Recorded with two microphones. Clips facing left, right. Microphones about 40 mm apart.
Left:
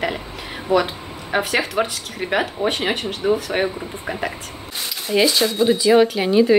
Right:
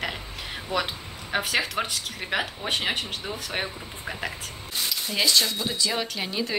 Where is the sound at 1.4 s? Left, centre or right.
Centre.